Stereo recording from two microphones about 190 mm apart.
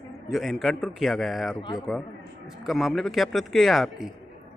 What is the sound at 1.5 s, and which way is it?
Speech, 25° left (ahead or behind).